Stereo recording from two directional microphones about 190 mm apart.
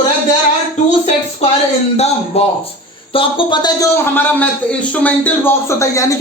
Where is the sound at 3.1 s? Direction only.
25° left (ahead or behind).